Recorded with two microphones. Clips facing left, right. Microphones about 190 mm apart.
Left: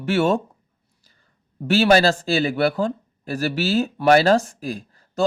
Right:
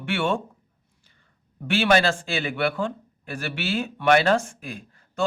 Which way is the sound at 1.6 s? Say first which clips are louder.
Left 4 dB; 40° left (ahead or behind).